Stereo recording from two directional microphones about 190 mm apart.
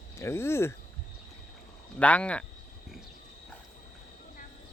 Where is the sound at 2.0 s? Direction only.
5° left (ahead or behind).